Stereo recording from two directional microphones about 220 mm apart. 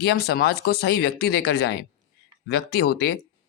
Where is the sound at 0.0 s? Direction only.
45° left (ahead or behind).